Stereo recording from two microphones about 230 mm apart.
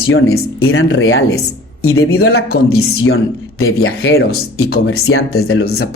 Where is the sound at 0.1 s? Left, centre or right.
Left.